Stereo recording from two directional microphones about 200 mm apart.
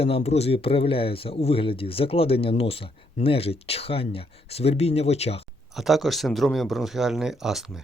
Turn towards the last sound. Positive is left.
turn(degrees=0)  # may be behind; listen again after turning